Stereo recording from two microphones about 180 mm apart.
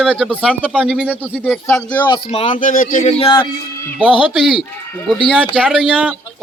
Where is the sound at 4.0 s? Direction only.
Centre (ahead or behind).